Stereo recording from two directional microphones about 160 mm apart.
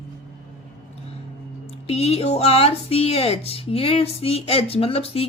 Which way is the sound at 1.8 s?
40° left (ahead or behind).